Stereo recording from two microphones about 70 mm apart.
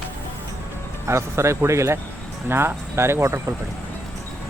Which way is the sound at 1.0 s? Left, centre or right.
Right.